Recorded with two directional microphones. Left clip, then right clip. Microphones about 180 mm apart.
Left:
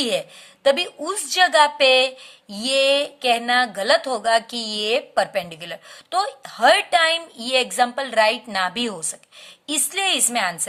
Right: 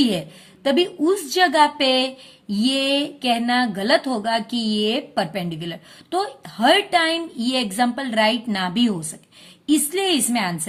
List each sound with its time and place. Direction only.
0.0 s a woman's voice: 25° left (ahead or behind)